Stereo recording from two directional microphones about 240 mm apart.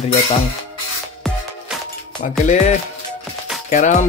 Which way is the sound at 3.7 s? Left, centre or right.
Left.